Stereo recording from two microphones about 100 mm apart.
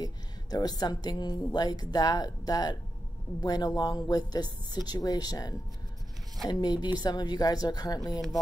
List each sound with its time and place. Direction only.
0.0 s a woman's voice: 40° left (ahead or behind)